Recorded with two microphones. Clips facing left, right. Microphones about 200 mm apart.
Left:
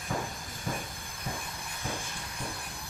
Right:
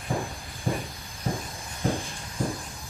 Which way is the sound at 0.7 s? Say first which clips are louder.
Right 7 dB; 35° right (ahead or behind).